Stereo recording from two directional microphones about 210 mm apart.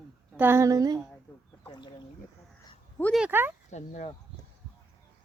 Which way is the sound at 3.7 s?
35° left (ahead or behind).